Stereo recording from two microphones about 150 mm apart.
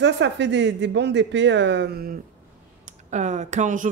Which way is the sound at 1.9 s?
90° right.